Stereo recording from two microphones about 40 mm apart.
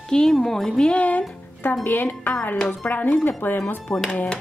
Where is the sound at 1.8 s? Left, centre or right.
Left.